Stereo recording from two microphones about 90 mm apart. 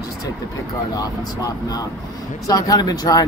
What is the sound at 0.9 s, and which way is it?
Speech, 45° left (ahead or behind).